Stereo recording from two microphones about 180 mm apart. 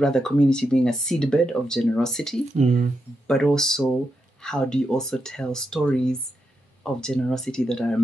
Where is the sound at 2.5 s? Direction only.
40° right (ahead or behind).